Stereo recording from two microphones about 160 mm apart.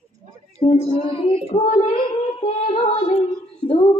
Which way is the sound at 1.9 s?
35° left (ahead or behind).